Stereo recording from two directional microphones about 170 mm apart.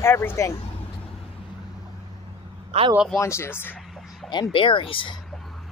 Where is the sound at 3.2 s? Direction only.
15° left (ahead or behind).